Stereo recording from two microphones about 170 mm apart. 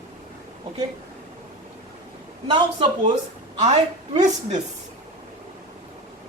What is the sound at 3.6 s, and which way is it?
A woman's voice, 45° right (ahead or behind).